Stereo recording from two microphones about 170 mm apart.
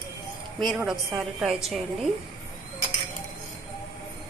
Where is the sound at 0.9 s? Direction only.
Centre (ahead or behind).